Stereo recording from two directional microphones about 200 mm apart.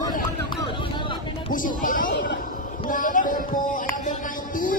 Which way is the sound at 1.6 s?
45° left (ahead or behind).